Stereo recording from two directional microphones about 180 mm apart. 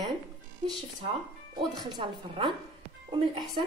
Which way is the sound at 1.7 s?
25° right (ahead or behind).